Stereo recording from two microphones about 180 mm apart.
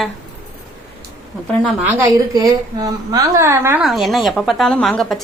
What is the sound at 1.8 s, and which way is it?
A woman's voice, 15° right (ahead or behind).